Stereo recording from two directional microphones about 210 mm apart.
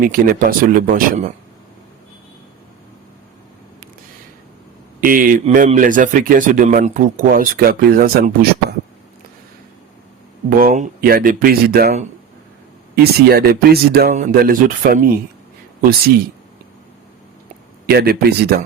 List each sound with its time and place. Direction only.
0.0 s speech: 45° right (ahead or behind)
4.9 s speech: 40° right (ahead or behind)
10.6 s speech: 45° right (ahead or behind)
13.0 s speech: 45° right (ahead or behind)
17.8 s speech: 45° right (ahead or behind)